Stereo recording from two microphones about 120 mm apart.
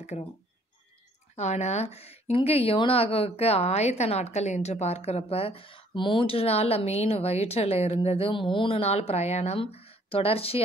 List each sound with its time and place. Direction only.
0.1 s a woman's voice: 55° left (ahead or behind)
1.3 s a woman's voice: 70° left (ahead or behind)